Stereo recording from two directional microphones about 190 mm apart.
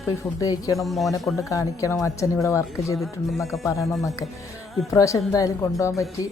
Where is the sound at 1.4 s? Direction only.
15° left (ahead or behind).